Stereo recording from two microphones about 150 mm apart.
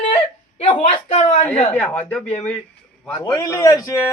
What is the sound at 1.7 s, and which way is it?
Speech, 5° left (ahead or behind).